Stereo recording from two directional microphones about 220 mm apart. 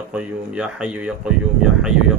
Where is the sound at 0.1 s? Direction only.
5° right (ahead or behind).